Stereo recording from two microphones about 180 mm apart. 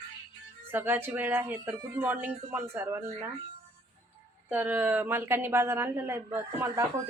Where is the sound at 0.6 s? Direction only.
10° right (ahead or behind).